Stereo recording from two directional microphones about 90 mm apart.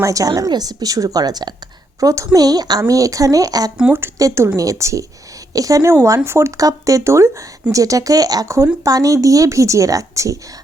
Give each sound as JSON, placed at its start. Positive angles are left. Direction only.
{"t": 0.0, "sound": "a woman's voice", "side_deg": -40}
{"t": 2.0, "sound": "speech", "side_deg": -35}
{"t": 5.9, "sound": "speech", "side_deg": -25}